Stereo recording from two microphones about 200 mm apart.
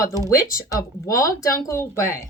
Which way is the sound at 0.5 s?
15° left (ahead or behind).